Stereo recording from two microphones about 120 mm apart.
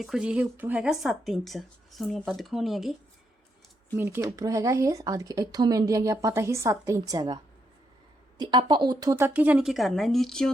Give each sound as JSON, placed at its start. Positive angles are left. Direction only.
{"t": 0.0, "sound": "speech", "side_deg": -5}
{"t": 0.9, "sound": "speech", "side_deg": 0}
{"t": 3.9, "sound": "speech", "side_deg": -20}
{"t": 8.4, "sound": "speech", "side_deg": -35}
{"t": 9.1, "sound": "speech", "side_deg": -20}
{"t": 9.6, "sound": "speech", "side_deg": 0}